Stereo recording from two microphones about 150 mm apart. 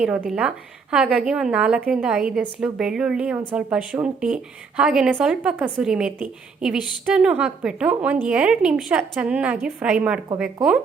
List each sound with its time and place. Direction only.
0.0 s a woman's voice: 10° right (ahead or behind)